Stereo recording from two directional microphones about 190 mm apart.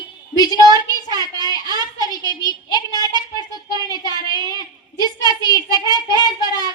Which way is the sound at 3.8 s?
20° left (ahead or behind).